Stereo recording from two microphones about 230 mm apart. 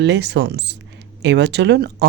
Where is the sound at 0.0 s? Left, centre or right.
Right.